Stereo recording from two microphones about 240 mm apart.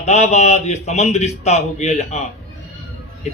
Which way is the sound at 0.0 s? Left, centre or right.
Left.